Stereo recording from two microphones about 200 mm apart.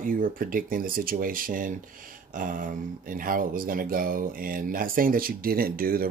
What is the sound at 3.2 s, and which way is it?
Speech, 45° right (ahead or behind).